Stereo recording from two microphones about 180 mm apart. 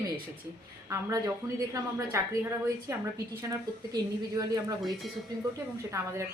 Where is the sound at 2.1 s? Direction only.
15° right (ahead or behind).